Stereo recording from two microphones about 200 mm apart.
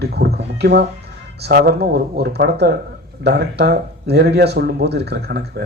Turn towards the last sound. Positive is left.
turn(degrees=-55)  # may be behind; listen again after turning